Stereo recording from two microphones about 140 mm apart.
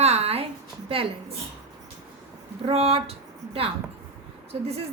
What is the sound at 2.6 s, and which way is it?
Speech, 45° right (ahead or behind).